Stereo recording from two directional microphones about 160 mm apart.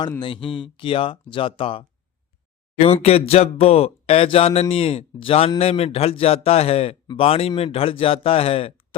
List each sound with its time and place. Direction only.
0.2 s speech: 30° left (ahead or behind)
2.8 s speech: 40° left (ahead or behind)